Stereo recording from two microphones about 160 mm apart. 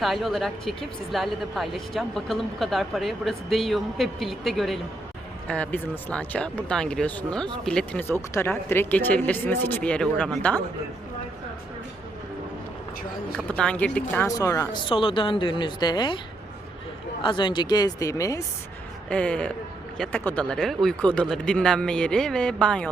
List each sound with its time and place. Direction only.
0.0 s speech: centre (ahead or behind)
13.3 s speech: 5° left (ahead or behind)
14.8 s a woman's voice: 35° left (ahead or behind)
17.2 s speech: 30° left (ahead or behind)
19.1 s speech: 10° left (ahead or behind)